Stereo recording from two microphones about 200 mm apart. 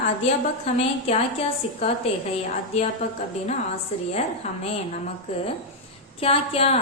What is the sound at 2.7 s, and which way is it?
Speech, 30° left (ahead or behind).